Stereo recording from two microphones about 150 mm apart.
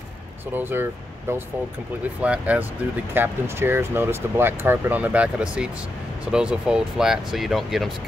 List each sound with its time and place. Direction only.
0.6 s speech: 15° right (ahead or behind)